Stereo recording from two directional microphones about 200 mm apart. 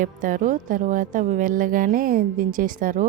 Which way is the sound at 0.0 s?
45° right (ahead or behind).